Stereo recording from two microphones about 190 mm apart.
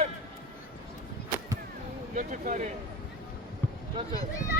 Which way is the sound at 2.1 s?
45° right (ahead or behind).